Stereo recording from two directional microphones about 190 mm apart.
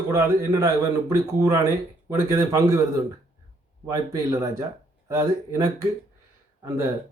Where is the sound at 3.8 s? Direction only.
15° right (ahead or behind).